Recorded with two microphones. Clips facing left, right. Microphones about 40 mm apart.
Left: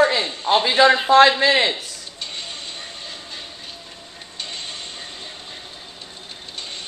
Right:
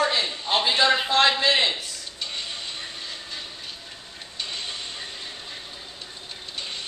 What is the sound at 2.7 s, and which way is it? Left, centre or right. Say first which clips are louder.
Vehicle: left 1 dB; centre.